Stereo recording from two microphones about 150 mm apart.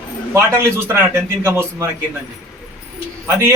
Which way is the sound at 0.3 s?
15° right (ahead or behind).